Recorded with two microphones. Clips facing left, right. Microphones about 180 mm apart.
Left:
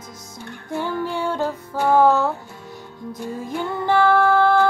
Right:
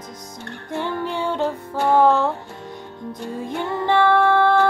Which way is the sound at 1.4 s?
5° left (ahead or behind).